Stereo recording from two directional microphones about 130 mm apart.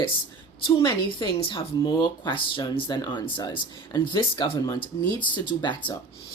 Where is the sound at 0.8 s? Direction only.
40° left (ahead or behind).